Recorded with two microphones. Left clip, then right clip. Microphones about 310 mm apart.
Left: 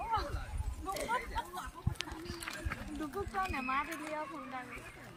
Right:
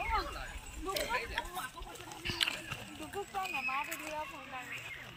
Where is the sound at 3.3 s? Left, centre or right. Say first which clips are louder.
Even; right.